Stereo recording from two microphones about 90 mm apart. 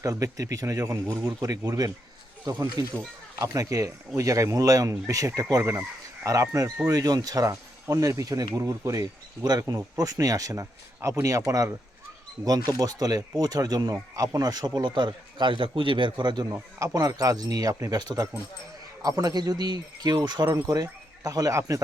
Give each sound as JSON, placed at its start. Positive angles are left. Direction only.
{"t": 0.0, "sound": "speech", "side_deg": -40}
{"t": 1.6, "sound": "speech", "side_deg": -45}
{"t": 2.5, "sound": "speech", "side_deg": -30}
{"t": 16.5, "sound": "speech", "side_deg": -40}
{"t": 19.0, "sound": "speech", "side_deg": -45}